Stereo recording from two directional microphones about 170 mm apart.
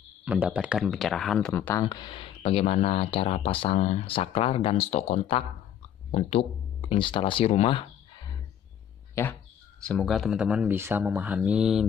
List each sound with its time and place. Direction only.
0.2 s speech: 10° right (ahead or behind)
1.5 s speech: 10° left (ahead or behind)
1.9 s speech: 25° left (ahead or behind)
6.9 s speech: 30° left (ahead or behind)
9.1 s speech: 10° left (ahead or behind)